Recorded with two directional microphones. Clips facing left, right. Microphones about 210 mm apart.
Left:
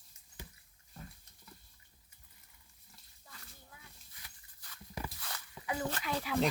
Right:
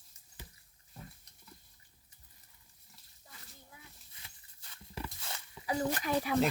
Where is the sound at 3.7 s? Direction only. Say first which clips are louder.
Right 1 dB; 25° right (ahead or behind).